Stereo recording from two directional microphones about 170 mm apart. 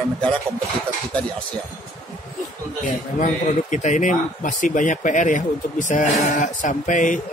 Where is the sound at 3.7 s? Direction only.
45° left (ahead or behind).